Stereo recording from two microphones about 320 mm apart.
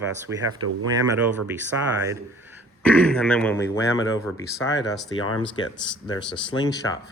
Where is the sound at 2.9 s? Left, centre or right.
Centre.